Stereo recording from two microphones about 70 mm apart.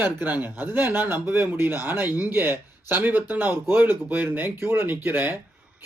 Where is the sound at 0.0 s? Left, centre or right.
Right.